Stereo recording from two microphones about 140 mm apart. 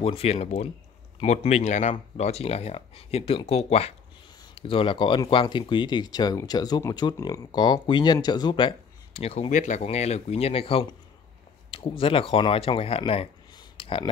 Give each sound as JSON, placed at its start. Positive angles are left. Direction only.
{"t": 0.0, "sound": "speech", "side_deg": 45}
{"t": 9.5, "sound": "speech", "side_deg": 60}
{"t": 13.6, "sound": "a sound", "side_deg": 40}